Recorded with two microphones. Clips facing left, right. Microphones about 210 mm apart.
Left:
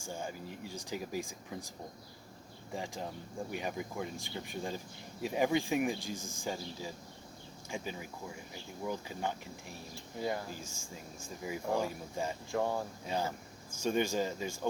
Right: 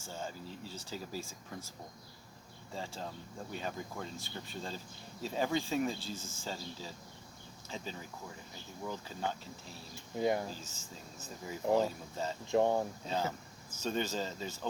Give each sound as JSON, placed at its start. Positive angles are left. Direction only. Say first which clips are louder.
{"t": 0.0, "sound": "speech", "louder": "left 2 dB", "side_deg": 15}
{"t": 2.7, "sound": "speech", "louder": "left 2 dB", "side_deg": 15}
{"t": 9.9, "sound": "speech", "louder": "right 4 dB", "side_deg": -20}
{"t": 10.5, "sound": "speech", "louder": "left 2 dB", "side_deg": 10}
{"t": 12.5, "sound": "speech", "louder": "right 6 dB", "side_deg": -20}
{"t": 13.7, "sound": "speech", "louder": "left 4 dB", "side_deg": 15}